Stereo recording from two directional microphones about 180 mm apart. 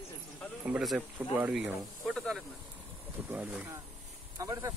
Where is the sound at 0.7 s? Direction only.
5° right (ahead or behind).